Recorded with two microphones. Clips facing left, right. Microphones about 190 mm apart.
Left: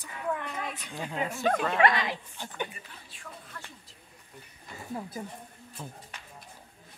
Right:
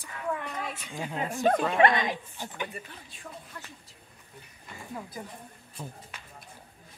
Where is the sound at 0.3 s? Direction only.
Centre (ahead or behind).